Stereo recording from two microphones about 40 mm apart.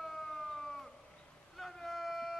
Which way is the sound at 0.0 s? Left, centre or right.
Centre.